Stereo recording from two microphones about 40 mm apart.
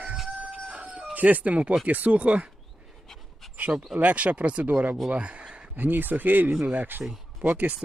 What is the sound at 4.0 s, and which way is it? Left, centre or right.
Speech, right.